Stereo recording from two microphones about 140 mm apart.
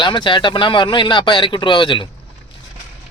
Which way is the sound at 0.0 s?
35° left (ahead or behind).